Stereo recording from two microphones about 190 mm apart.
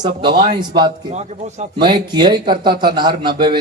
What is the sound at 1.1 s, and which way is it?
Speech, 35° right (ahead or behind).